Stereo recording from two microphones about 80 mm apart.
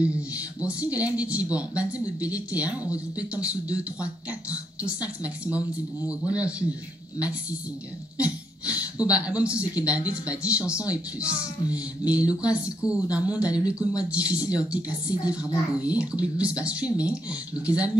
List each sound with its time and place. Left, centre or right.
0.0 s a man's voice: centre
8.2 s speech: centre